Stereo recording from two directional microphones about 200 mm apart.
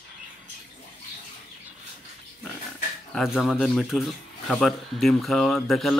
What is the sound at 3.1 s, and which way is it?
Speech, centre (ahead or behind).